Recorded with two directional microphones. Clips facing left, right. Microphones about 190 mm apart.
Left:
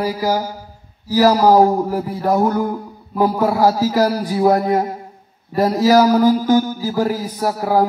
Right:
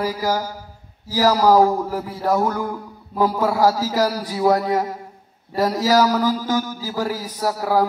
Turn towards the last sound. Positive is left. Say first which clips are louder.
# left 3 dB
turn(degrees=25)  # may be behind; listen again after turning